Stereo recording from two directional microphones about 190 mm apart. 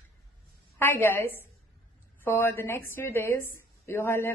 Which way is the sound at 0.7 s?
10° left (ahead or behind).